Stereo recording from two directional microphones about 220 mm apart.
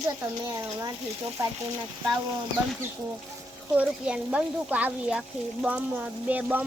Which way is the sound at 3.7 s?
5° right (ahead or behind).